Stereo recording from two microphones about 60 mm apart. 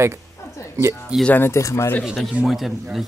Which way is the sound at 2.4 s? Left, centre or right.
Centre.